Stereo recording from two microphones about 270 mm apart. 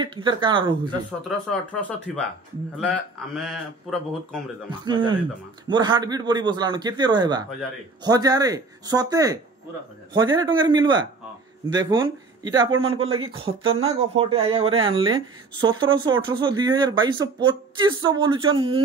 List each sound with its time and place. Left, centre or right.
0.0 s speech: centre
1.5 s speech: centre
4.6 s speech: centre